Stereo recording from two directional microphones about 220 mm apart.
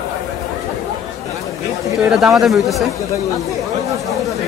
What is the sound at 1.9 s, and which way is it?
Speech, centre (ahead or behind).